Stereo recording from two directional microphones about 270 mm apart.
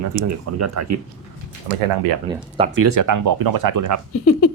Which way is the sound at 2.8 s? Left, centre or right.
Right.